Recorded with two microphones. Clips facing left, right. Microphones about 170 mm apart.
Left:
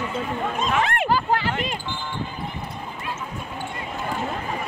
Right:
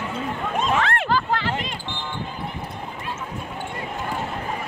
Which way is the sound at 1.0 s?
15° left (ahead or behind).